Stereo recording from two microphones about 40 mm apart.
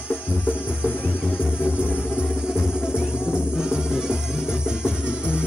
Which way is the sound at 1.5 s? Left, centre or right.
Left.